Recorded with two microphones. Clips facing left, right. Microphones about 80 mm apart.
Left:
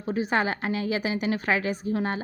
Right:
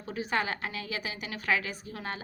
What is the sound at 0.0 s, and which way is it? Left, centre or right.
A woman's voice, left.